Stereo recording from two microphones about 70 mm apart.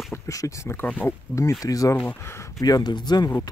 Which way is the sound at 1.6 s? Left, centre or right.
Left.